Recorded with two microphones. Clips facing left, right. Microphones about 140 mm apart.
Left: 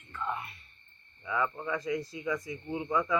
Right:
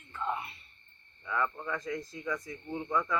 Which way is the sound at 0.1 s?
20° right (ahead or behind).